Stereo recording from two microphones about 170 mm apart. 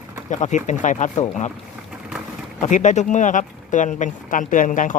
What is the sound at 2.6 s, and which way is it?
Speech, 45° left (ahead or behind).